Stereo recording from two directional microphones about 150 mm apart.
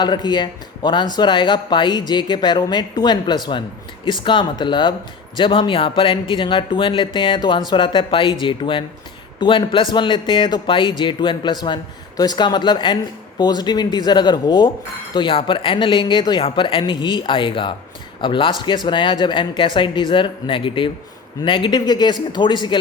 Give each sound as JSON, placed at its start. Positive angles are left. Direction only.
{"t": 0.0, "sound": "a man's voice", "side_deg": 30}